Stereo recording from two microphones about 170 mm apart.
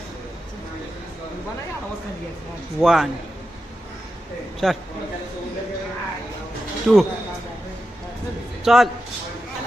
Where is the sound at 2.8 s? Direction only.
Centre (ahead or behind).